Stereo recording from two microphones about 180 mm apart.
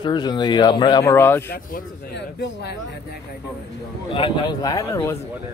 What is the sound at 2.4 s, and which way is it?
Speech, 65° left (ahead or behind).